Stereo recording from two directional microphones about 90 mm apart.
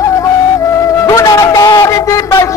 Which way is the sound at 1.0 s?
40° left (ahead or behind).